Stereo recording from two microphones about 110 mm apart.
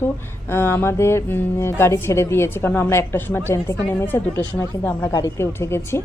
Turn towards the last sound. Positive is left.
turn(degrees=25)  # may be behind; listen again after turning